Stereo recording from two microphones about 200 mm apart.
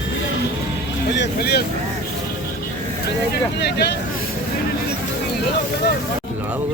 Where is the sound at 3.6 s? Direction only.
55° left (ahead or behind).